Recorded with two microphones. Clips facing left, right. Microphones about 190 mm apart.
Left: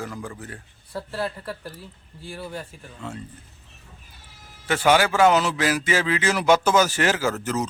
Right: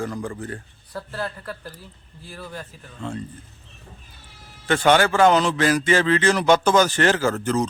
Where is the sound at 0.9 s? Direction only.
25° left (ahead or behind).